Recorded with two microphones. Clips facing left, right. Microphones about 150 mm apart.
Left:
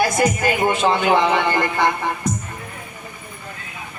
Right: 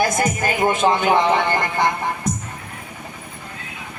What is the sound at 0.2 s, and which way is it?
Speech, 45° right (ahead or behind).